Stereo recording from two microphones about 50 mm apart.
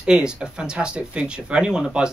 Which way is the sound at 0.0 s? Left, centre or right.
Centre.